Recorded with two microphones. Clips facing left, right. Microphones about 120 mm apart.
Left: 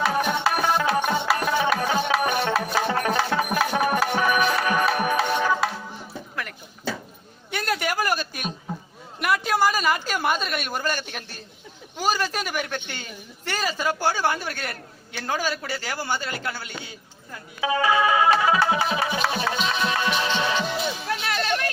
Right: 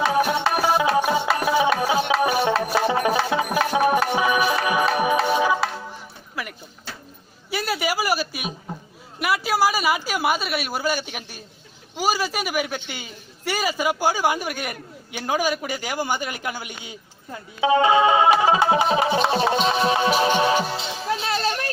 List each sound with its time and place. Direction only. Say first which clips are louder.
0.0 s music: right 3 dB; 5° right (ahead or behind)
7.5 s a sound: right 1 dB; 5° right (ahead or behind)
9.2 s a woman's voice: right 1 dB; 5° right (ahead or behind); by 18.3 s 25° right (ahead or behind)
18.3 s music: right 3 dB; 25° right (ahead or behind)